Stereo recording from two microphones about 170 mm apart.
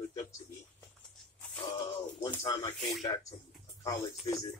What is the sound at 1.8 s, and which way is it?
Speech, 25° left (ahead or behind).